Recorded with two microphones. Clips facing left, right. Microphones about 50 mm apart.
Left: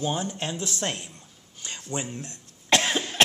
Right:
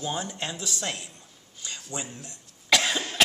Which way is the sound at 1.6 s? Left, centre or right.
Left.